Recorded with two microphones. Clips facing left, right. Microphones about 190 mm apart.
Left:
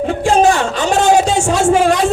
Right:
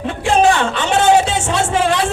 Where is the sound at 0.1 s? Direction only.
45° left (ahead or behind).